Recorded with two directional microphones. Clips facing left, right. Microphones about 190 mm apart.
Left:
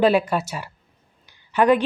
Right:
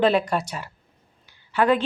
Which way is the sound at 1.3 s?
15° left (ahead or behind).